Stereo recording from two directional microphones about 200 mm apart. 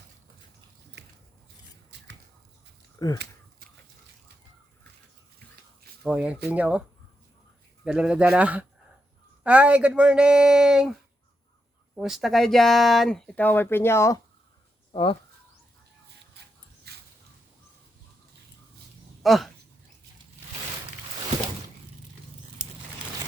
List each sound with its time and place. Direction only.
1.0 s biting: 60° right (ahead or behind)
3.0 s speech: 15° left (ahead or behind)
6.0 s speech: 5° right (ahead or behind)
7.9 s speech: 5° right (ahead or behind)
11.9 s speech: centre (ahead or behind); by 14.2 s 15° left (ahead or behind)
14.9 s speech: 25° left (ahead or behind)
16.9 s a sound: 55° right (ahead or behind)
19.2 s speech: centre (ahead or behind)